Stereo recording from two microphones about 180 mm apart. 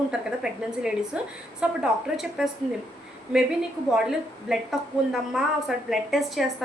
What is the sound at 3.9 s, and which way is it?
A woman's voice, 5° right (ahead or behind).